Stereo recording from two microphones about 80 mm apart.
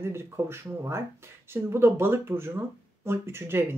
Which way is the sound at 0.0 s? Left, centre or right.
Right.